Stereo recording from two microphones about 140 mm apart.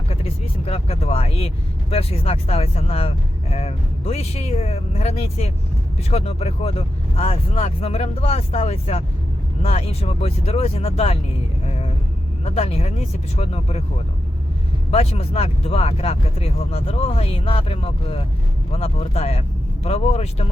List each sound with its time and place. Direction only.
0.1 s speech: 45° left (ahead or behind)
11.6 s vehicle: 50° left (ahead or behind)
12.5 s speech: 45° left (ahead or behind)
14.8 s speech: 45° left (ahead or behind)